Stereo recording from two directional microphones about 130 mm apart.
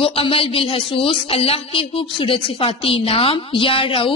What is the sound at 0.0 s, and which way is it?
Speech, 45° left (ahead or behind).